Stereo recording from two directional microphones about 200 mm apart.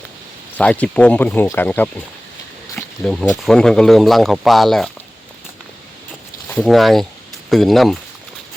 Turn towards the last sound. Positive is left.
turn(degrees=0)  # may be behind; listen again after turning